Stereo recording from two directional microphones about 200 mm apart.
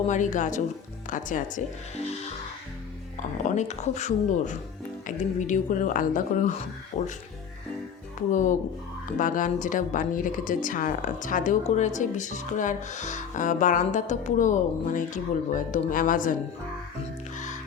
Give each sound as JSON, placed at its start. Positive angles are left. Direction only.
{"t": 0.1, "sound": "a woman's voice", "side_deg": 40}
{"t": 3.4, "sound": "a woman's voice", "side_deg": 35}
{"t": 8.3, "sound": "a woman's voice", "side_deg": 40}
{"t": 17.3, "sound": "music", "side_deg": 40}